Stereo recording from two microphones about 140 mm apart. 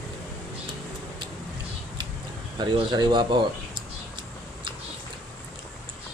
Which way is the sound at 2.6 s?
30° right (ahead or behind).